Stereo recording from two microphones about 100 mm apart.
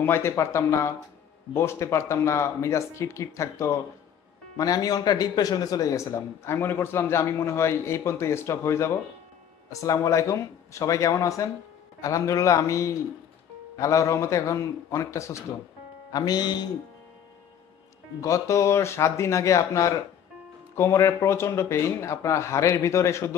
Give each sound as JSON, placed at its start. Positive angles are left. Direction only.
{"t": 0.0, "sound": "a man's voice", "side_deg": 25}
{"t": 18.2, "sound": "a man's voice", "side_deg": 30}